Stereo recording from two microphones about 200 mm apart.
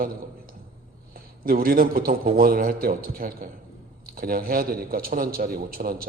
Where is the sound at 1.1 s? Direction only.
45° right (ahead or behind).